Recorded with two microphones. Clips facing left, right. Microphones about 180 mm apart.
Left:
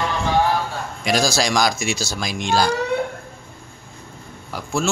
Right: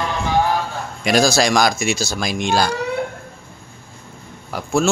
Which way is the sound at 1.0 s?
55° right (ahead or behind).